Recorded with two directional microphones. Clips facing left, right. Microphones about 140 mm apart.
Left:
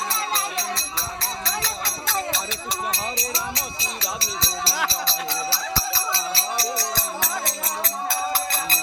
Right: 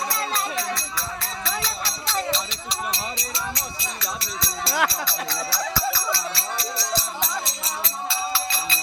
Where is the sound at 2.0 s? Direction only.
55° left (ahead or behind).